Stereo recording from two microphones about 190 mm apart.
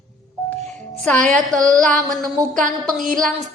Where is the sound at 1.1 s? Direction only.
40° right (ahead or behind).